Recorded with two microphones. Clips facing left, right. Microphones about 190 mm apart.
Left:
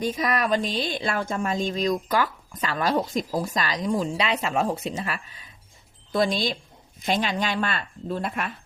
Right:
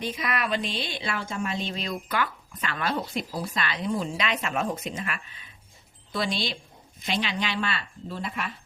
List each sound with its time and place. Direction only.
0.0 s speech: 45° left (ahead or behind)
6.1 s speech: 45° left (ahead or behind)